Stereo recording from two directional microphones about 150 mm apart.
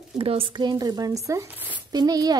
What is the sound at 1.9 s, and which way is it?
Speech, 25° right (ahead or behind).